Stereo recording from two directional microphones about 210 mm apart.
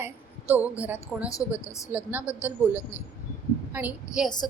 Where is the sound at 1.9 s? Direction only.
10° right (ahead or behind).